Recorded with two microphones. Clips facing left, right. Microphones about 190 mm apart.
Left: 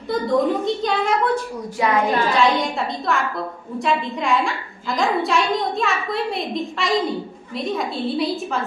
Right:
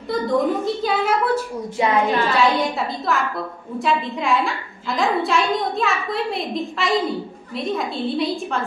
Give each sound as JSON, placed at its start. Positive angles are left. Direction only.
{"t": 0.1, "sound": "a woman's voice", "side_deg": 0}
{"t": 1.8, "sound": "a woman's voice", "side_deg": -25}
{"t": 2.3, "sound": "a woman's voice", "side_deg": 0}